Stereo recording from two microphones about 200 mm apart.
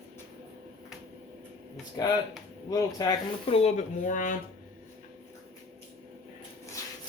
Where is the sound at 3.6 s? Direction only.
35° left (ahead or behind).